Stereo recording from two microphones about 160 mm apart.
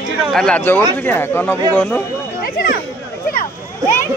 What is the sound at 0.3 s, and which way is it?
Speech, 5° left (ahead or behind).